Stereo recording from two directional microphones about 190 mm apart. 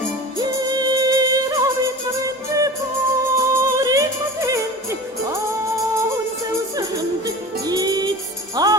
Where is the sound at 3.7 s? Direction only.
15° right (ahead or behind).